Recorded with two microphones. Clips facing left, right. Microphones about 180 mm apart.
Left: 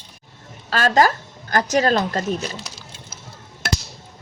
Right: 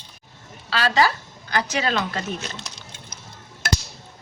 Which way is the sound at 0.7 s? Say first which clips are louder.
Left 4 dB; 45° left (ahead or behind).